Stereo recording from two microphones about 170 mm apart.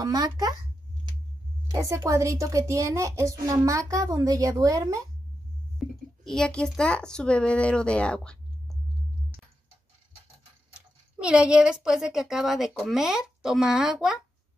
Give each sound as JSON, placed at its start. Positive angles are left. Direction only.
{"t": 0.0, "sound": "a child's voice", "side_deg": -20}
{"t": 1.7, "sound": "a child's voice", "side_deg": -15}
{"t": 6.2, "sound": "speech", "side_deg": 5}
{"t": 10.7, "sound": "speech", "side_deg": -5}